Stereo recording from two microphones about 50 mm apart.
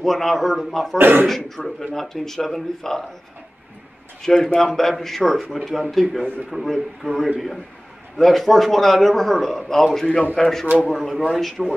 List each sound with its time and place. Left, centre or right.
0.0 s a man's voice: centre
0.9 s speech: right
1.6 s speech: centre
4.2 s a man's voice: centre